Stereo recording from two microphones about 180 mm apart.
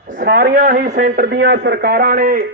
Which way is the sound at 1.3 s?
75° right (ahead or behind).